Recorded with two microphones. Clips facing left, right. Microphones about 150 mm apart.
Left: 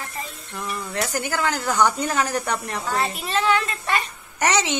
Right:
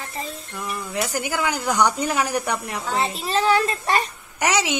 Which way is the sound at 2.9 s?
25° right (ahead or behind).